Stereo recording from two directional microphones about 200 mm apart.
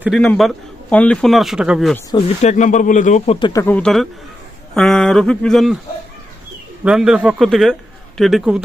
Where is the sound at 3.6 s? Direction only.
5° left (ahead or behind).